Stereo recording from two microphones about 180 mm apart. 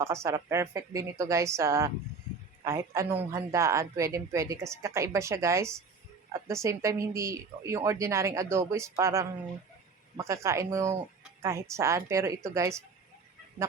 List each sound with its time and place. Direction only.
0.0 s a woman's voice: 15° right (ahead or behind)